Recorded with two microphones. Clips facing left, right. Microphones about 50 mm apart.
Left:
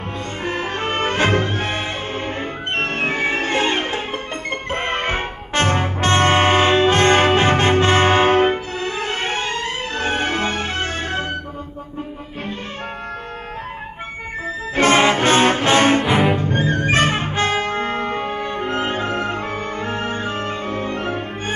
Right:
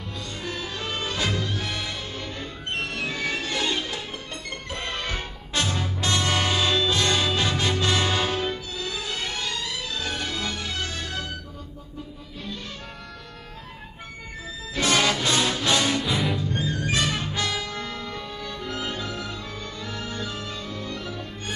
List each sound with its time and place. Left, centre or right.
0.4 s music: left
14.8 s music: left
16.1 s music: left
16.3 s music: left